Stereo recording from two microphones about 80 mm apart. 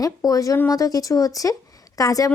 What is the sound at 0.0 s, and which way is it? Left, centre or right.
Speech, left.